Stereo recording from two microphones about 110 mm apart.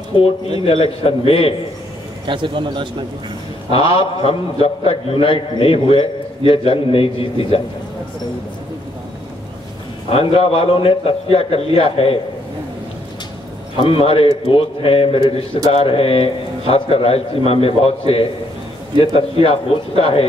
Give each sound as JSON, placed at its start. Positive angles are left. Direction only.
{"t": 0.1, "sound": "a man's voice", "side_deg": 60}
{"t": 2.2, "sound": "a man's voice", "side_deg": -50}
{"t": 3.7, "sound": "a man's voice", "side_deg": 55}
{"t": 10.0, "sound": "a man's voice", "side_deg": 60}
{"t": 13.7, "sound": "a man's voice", "side_deg": 60}